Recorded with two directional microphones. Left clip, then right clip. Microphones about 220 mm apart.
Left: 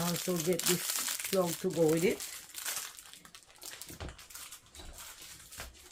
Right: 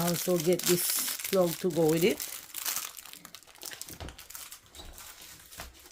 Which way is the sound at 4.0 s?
30° right (ahead or behind).